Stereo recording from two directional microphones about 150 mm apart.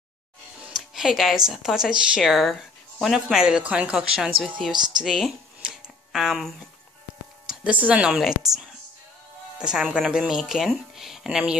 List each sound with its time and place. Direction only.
0.6 s speech: 5° right (ahead or behind)
4.7 s speech: 30° right (ahead or behind)
5.0 s a sound: centre (ahead or behind)
7.4 s speech: 10° right (ahead or behind)
9.6 s speech: 5° right (ahead or behind)